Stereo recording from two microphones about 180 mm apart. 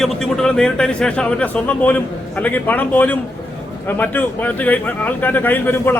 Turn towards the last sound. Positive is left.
turn(degrees=10)  # may be behind; listen again after turning